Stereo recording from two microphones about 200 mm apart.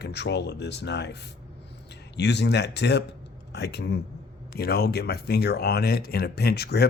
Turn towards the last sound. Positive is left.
turn(degrees=55)  # may be behind; listen again after turning